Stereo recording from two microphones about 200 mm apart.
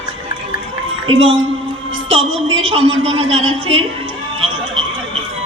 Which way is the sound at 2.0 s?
30° right (ahead or behind).